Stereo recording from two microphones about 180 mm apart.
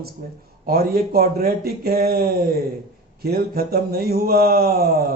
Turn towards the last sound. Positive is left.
turn(degrees=-60)  # may be behind; listen again after turning